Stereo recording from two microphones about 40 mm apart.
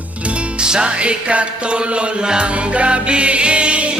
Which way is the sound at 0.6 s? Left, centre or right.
Right.